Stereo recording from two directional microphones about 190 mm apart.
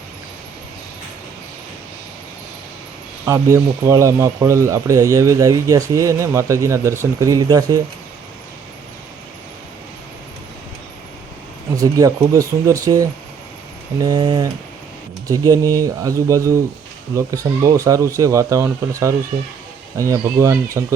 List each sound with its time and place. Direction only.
3.2 s speech: 15° right (ahead or behind)
11.8 s speech: 15° right (ahead or behind)